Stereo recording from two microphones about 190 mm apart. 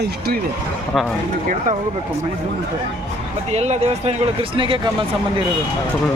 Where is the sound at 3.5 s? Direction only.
35° right (ahead or behind).